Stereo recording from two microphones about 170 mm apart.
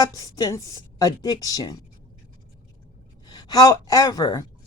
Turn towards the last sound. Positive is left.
turn(degrees=20)  # may be behind; listen again after turning